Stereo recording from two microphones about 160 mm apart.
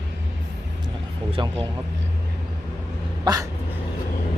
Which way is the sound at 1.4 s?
30° right (ahead or behind).